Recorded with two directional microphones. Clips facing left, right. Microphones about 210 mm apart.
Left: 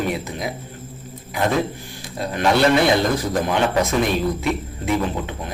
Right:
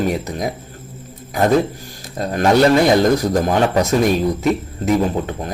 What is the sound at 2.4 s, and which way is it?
Speech, 45° right (ahead or behind).